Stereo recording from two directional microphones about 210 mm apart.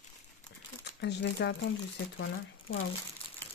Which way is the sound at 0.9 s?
55° left (ahead or behind).